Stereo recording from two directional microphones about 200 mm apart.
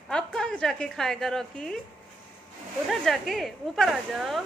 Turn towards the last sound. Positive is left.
turn(degrees=0)  # may be behind; listen again after turning